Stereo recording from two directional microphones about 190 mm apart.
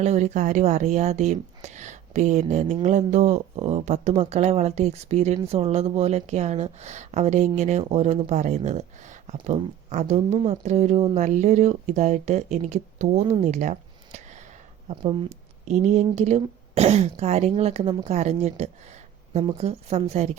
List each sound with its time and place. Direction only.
0.0 s speech: 35° right (ahead or behind)
13.4 s a sound: 40° right (ahead or behind)
14.8 s speech: 35° right (ahead or behind)